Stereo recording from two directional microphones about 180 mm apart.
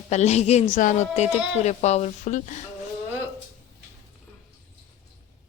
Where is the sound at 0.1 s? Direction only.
40° left (ahead or behind).